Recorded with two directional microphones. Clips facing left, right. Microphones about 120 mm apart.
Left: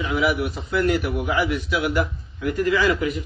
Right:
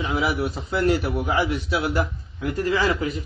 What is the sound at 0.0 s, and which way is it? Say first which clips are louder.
A man's voice: left 2 dB; 30° right (ahead or behind).